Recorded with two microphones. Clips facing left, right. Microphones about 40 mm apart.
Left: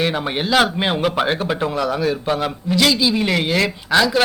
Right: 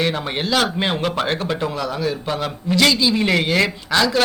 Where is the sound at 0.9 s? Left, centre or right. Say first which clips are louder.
Left 2 dB; centre.